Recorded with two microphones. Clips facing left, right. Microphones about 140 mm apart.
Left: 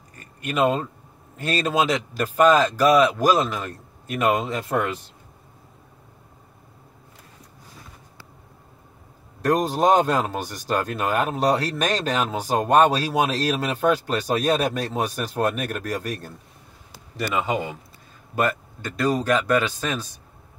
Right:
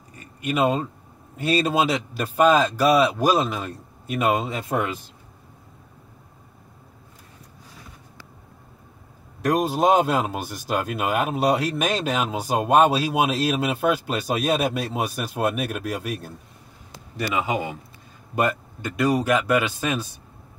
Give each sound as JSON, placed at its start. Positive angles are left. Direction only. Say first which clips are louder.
{"t": 0.4, "sound": "speech", "louder": "even", "side_deg": -10}
{"t": 9.4, "sound": "speech", "louder": "even", "side_deg": -10}
{"t": 17.3, "sound": "a man's voice", "louder": "even", "side_deg": -5}
{"t": 18.3, "sound": "speech", "louder": "even", "side_deg": -15}